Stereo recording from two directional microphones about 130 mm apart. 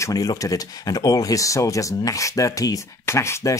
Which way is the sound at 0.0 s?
25° left (ahead or behind).